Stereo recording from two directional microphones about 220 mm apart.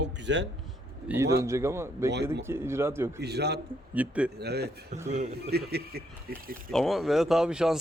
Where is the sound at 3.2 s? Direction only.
50° right (ahead or behind).